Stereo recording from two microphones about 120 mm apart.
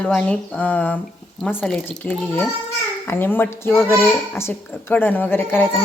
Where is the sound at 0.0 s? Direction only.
10° left (ahead or behind).